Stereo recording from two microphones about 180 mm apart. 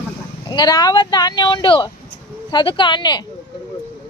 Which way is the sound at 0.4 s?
25° left (ahead or behind).